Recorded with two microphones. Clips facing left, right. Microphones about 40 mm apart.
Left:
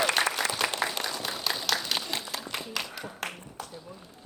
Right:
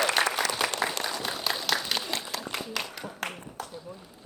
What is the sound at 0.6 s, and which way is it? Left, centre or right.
Applause, centre.